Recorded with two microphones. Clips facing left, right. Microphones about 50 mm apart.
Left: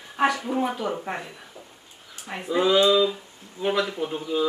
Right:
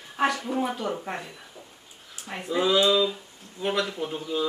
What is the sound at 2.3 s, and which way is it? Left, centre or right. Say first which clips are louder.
Speech: left 3 dB; centre.